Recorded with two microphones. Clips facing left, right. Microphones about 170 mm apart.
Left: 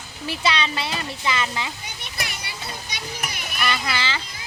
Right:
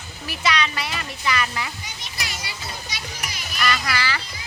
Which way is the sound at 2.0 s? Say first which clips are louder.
Left 1 dB; 55° left (ahead or behind).